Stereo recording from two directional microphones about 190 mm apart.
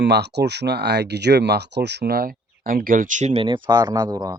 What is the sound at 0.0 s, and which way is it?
Speech, 60° right (ahead or behind).